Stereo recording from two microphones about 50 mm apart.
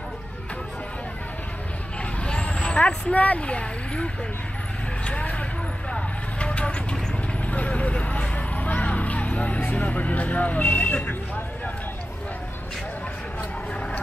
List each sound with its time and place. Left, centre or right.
2.2 s vehicle: left
7.4 s speech: left